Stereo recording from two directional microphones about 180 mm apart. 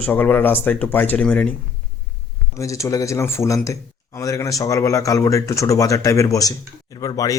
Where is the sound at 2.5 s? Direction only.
15° left (ahead or behind).